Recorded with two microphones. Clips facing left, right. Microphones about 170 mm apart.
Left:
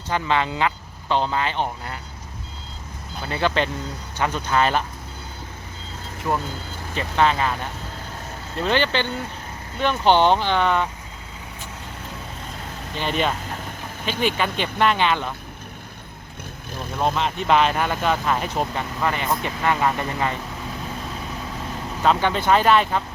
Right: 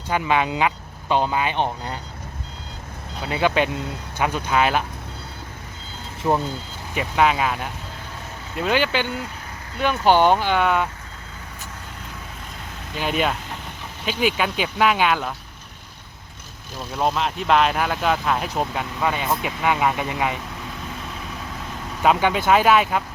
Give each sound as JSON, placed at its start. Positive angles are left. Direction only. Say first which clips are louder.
{"t": 0.1, "sound": "speech", "louder": "right 1 dB", "side_deg": -15}
{"t": 3.2, "sound": "speech", "louder": "right 2 dB", "side_deg": -15}
{"t": 6.3, "sound": "speech", "louder": "right 4 dB", "side_deg": -20}
{"t": 6.9, "sound": "speech", "louder": "right 1 dB", "side_deg": -10}
{"t": 13.0, "sound": "speech", "louder": "right 1 dB", "side_deg": -5}
{"t": 16.9, "sound": "speech", "louder": "even", "side_deg": -5}
{"t": 22.0, "sound": "speech", "louder": "right 1 dB", "side_deg": -10}